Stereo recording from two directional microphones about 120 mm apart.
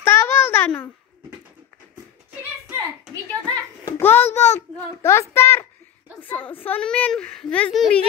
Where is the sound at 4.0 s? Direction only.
15° left (ahead or behind); by 8.0 s centre (ahead or behind).